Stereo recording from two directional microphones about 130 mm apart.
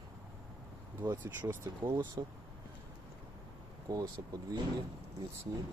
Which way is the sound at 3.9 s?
30° right (ahead or behind).